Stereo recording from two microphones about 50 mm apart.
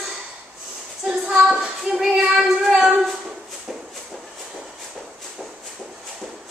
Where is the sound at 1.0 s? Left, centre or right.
Centre.